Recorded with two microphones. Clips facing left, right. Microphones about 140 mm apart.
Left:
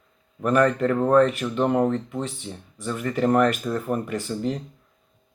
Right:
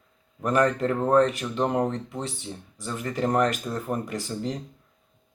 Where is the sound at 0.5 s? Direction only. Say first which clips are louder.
Left 3 dB; 30° right (ahead or behind).